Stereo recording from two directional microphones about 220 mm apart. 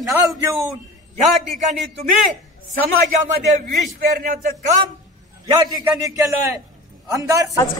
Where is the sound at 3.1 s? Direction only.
35° right (ahead or behind).